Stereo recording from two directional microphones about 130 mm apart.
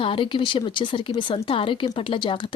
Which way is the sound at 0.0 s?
40° left (ahead or behind).